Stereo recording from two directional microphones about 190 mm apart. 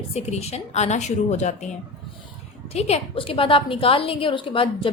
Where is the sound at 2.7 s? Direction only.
30° left (ahead or behind).